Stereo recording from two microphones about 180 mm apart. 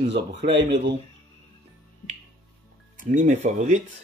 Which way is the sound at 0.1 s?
80° right.